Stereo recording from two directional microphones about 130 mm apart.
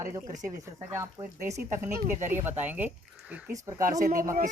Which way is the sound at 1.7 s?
75° right (ahead or behind).